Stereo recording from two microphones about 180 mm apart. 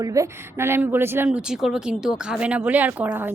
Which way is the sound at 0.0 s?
20° right (ahead or behind).